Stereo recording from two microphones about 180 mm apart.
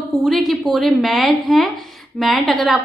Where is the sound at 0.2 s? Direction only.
Centre (ahead or behind).